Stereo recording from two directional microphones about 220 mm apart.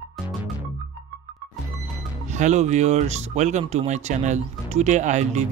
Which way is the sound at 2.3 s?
30° right (ahead or behind).